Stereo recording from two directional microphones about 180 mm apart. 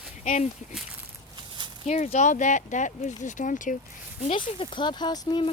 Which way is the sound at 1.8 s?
40° left (ahead or behind).